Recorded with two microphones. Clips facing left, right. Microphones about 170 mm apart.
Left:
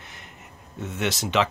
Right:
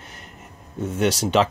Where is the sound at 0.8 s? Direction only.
35° right (ahead or behind).